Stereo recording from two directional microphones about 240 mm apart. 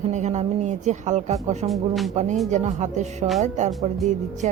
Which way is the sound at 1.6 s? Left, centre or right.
Centre.